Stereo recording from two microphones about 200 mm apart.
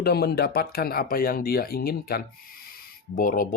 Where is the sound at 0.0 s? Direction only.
55° left (ahead or behind).